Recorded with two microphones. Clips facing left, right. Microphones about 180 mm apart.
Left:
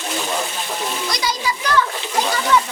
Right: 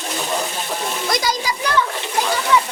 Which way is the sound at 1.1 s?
45° right (ahead or behind).